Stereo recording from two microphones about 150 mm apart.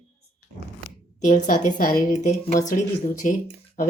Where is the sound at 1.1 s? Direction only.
55° left (ahead or behind).